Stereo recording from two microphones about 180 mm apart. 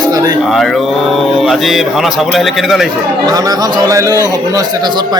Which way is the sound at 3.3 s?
20° right (ahead or behind).